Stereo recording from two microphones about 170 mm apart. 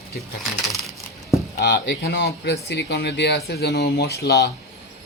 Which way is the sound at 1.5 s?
70° left (ahead or behind).